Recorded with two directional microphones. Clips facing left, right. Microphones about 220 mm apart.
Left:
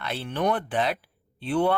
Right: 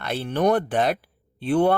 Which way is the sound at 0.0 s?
45° right (ahead or behind).